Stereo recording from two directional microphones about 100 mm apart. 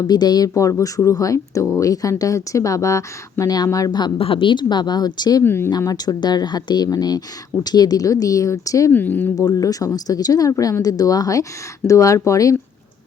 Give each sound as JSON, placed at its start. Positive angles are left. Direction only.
{"t": 0.0, "sound": "speech", "side_deg": 45}
{"t": 4.2, "sound": "speech", "side_deg": 65}
{"t": 5.4, "sound": "speech", "side_deg": 25}
{"t": 5.8, "sound": "speech", "side_deg": 40}
{"t": 8.9, "sound": "speech", "side_deg": 20}
{"t": 9.4, "sound": "speech", "side_deg": 40}